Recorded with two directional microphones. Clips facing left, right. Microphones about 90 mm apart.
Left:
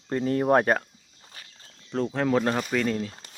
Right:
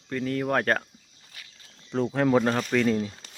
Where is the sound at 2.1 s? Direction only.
5° right (ahead or behind).